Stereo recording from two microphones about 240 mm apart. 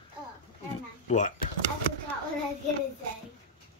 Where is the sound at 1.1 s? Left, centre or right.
Left.